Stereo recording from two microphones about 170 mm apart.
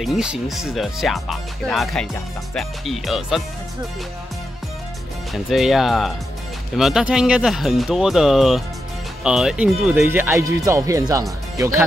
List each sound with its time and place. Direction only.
0.0 s speech: 5° right (ahead or behind)
5.3 s speech: centre (ahead or behind)